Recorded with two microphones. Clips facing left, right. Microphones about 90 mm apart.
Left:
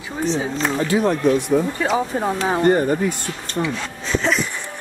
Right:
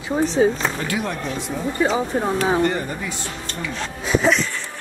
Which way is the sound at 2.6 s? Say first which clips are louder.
Left 6 dB; 45° left (ahead or behind).